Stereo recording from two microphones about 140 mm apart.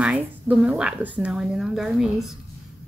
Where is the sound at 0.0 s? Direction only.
10° right (ahead or behind).